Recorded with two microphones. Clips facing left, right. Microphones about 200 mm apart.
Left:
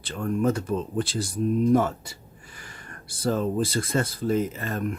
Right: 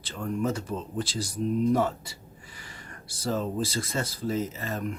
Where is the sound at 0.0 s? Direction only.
55° left (ahead or behind).